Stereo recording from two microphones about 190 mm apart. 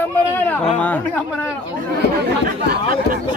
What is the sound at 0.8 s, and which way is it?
Speech, 10° left (ahead or behind).